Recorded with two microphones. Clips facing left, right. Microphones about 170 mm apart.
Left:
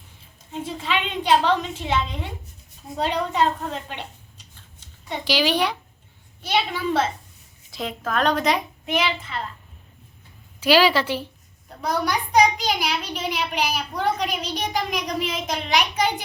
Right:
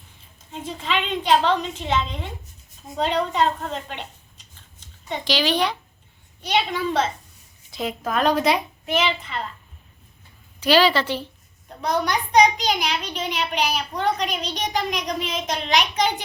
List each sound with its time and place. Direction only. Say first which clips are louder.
0.5 s a child's voice: even; 10° left (ahead or behind)
5.0 s a child's voice: left 1 dB; 10° left (ahead or behind); by 8.5 s 5° right (ahead or behind)
8.9 s a child's voice: right 1 dB; 10° left (ahead or behind)
10.6 s a child's voice: even; 10° left (ahead or behind)